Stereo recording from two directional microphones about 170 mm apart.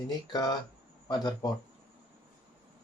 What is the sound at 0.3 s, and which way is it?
Speech, 20° left (ahead or behind).